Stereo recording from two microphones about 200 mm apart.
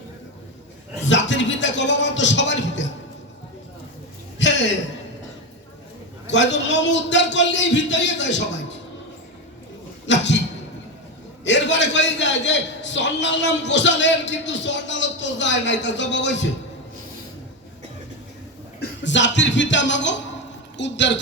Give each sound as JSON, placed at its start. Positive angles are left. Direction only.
{"t": 1.0, "sound": "a man's voice", "side_deg": 65}
{"t": 4.4, "sound": "a sound", "side_deg": 65}
{"t": 6.3, "sound": "a man's voice", "side_deg": 65}
{"t": 10.1, "sound": "a sound", "side_deg": 65}
{"t": 11.4, "sound": "a man's voice", "side_deg": 65}
{"t": 18.8, "sound": "a man's voice", "side_deg": 65}